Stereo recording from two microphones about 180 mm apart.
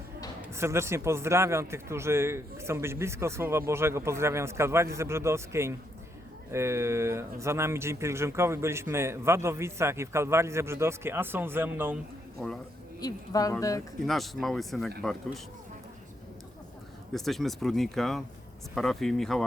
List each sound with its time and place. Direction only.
0.5 s speech: 15° right (ahead or behind)
12.4 s speech: 5° left (ahead or behind)
13.0 s a woman's voice: 20° left (ahead or behind)
14.1 s speech: centre (ahead or behind)
17.2 s speech: centre (ahead or behind)